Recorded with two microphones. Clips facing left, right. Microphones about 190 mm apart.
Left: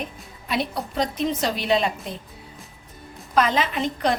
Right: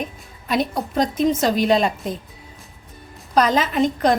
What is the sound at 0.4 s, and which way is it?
A woman's voice, 45° right (ahead or behind).